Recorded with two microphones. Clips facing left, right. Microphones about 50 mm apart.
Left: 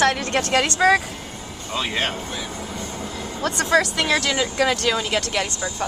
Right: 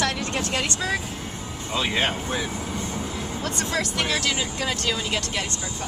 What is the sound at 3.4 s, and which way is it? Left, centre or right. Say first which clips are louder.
Speech: left 9 dB; left.